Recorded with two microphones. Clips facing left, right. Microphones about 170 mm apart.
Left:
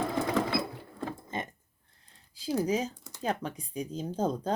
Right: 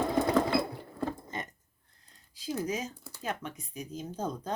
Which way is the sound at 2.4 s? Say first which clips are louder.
Left 5 dB; 30° left (ahead or behind).